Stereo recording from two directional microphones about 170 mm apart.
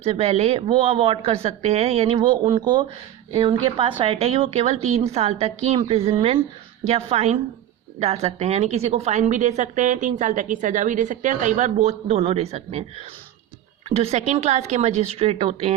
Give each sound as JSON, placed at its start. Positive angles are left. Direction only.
{"t": 0.0, "sound": "a woman's voice", "side_deg": -35}
{"t": 13.9, "sound": "a woman's voice", "side_deg": -40}